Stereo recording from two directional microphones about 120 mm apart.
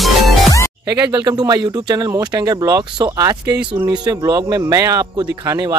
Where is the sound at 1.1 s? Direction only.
35° right (ahead or behind).